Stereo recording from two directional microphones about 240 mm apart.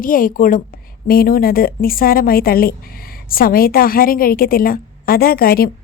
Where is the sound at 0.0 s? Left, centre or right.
Left.